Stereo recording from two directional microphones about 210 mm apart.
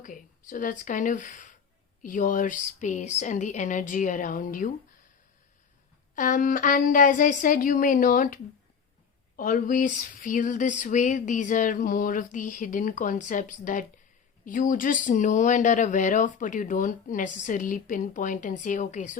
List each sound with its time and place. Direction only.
0.0 s speech: 40° left (ahead or behind)
6.1 s speech: 40° left (ahead or behind)